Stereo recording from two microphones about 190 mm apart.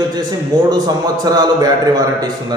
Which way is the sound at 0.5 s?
20° right (ahead or behind).